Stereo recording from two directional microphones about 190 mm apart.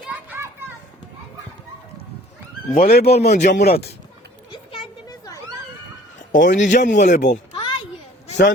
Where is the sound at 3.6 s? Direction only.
55° left (ahead or behind).